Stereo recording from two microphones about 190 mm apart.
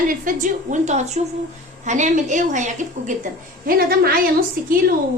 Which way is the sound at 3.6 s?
50° right (ahead or behind).